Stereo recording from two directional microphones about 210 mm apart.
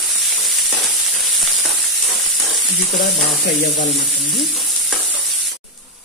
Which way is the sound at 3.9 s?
Centre (ahead or behind).